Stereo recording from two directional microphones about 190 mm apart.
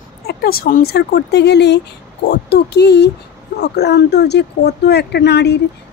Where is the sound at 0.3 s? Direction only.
50° left (ahead or behind).